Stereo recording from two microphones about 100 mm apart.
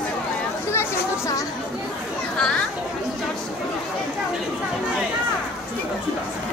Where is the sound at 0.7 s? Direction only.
30° left (ahead or behind).